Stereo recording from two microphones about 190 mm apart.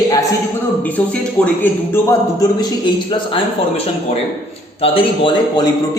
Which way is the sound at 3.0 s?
25° left (ahead or behind).